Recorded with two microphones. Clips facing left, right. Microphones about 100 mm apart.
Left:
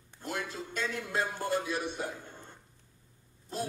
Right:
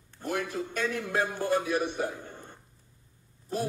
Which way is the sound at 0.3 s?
50° right (ahead or behind).